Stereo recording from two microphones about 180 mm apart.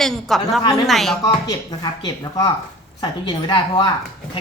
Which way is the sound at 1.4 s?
20° left (ahead or behind).